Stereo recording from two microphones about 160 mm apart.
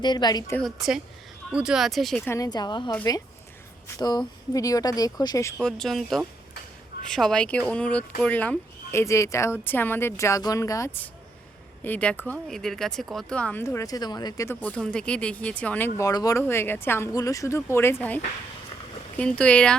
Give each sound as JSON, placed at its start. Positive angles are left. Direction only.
{"t": 0.0, "sound": "speech", "side_deg": 25}
{"t": 0.6, "sound": "speech", "side_deg": -5}
{"t": 2.2, "sound": "speech", "side_deg": 20}
{"t": 3.9, "sound": "speech", "side_deg": 25}
{"t": 5.6, "sound": "speech", "side_deg": 0}